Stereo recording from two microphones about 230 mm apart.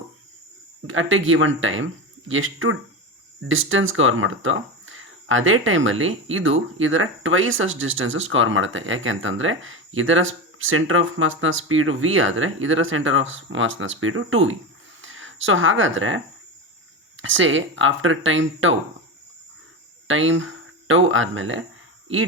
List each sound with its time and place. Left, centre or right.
0.9 s speech: right
20.1 s speech: right